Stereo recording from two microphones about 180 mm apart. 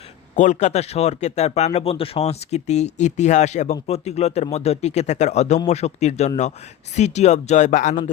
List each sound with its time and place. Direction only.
0.3 s speech: 40° left (ahead or behind)